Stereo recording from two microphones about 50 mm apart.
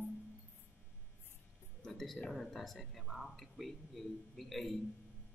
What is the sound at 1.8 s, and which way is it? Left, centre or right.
Speech, centre.